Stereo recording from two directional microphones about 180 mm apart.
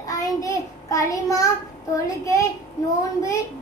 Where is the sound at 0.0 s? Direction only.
20° left (ahead or behind).